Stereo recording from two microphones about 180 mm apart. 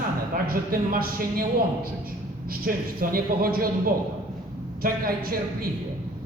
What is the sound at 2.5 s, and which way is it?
Speech, 50° right (ahead or behind).